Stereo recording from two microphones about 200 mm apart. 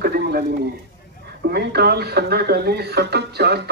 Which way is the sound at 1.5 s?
55° right (ahead or behind).